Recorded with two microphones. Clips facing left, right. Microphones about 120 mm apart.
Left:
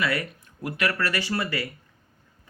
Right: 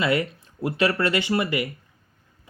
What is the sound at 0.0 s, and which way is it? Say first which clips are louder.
Speech: right 4 dB; 25° right (ahead or behind).